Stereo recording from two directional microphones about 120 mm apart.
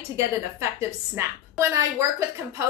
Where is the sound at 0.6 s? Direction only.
25° right (ahead or behind).